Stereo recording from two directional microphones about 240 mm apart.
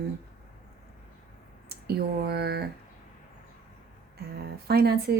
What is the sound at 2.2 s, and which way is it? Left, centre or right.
Speech, right.